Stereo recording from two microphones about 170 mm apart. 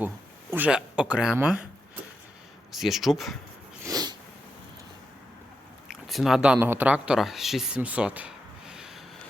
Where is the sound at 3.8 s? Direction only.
20° right (ahead or behind).